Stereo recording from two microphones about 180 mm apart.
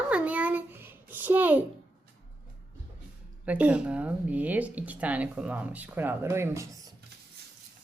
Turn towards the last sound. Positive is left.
turn(degrees=-15)  # may be behind; listen again after turning